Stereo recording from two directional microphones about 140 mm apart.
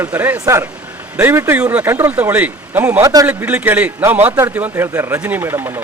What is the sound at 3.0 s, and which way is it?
Speech, 25° right (ahead or behind).